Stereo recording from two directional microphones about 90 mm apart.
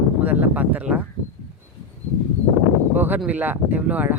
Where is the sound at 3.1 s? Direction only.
15° right (ahead or behind).